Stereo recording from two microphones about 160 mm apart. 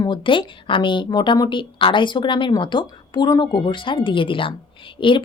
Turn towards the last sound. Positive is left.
turn(degrees=30)  # may be behind; listen again after turning